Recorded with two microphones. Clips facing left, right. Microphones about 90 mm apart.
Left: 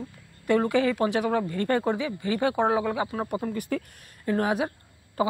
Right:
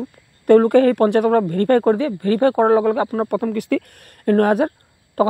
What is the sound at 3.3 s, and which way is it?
Speech, 60° right (ahead or behind).